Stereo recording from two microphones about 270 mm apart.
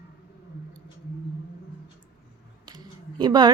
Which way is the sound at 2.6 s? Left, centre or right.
Centre.